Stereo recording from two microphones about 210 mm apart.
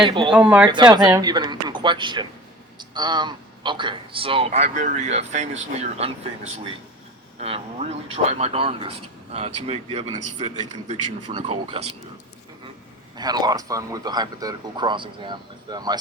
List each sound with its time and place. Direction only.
0.0 s a man's voice: 20° right (ahead or behind)
0.3 s speech: 5° right (ahead or behind)
0.7 s a man's voice: 20° right (ahead or behind)
7.3 s a man's voice: 30° right (ahead or behind)
13.1 s a man's voice: 20° right (ahead or behind)